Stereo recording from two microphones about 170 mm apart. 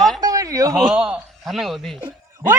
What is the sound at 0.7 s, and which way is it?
Speech, centre (ahead or behind).